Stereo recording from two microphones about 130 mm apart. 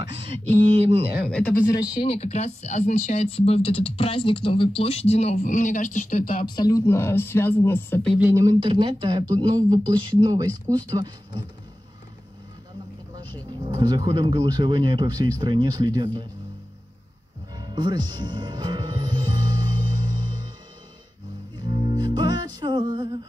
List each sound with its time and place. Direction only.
1.7 s speech: 30° left (ahead or behind)
2.0 s speech: 55° left (ahead or behind)
5.4 s speech: 75° left (ahead or behind)
6.4 s speech: 30° left (ahead or behind)
6.9 s speech: 20° left (ahead or behind)
8.2 s speech: 25° right (ahead or behind)
8.5 s speech: 40° right (ahead or behind)
13.7 s speech: 30° right (ahead or behind)
17.6 s music: 35° right (ahead or behind)
21.5 s music: 35° right (ahead or behind)